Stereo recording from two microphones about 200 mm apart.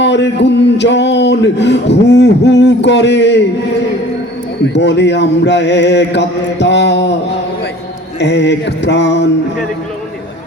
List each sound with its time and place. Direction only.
0.0 s a sound: 60° left (ahead or behind)
4.6 s mantra: 60° left (ahead or behind)
8.2 s mantra: 60° left (ahead or behind)